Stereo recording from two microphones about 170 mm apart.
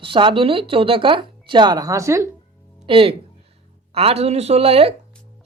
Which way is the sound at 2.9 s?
30° right (ahead or behind).